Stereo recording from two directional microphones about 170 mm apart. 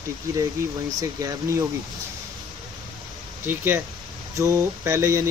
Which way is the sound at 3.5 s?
10° right (ahead or behind).